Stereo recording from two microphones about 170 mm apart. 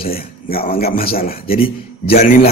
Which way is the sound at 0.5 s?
60° left (ahead or behind).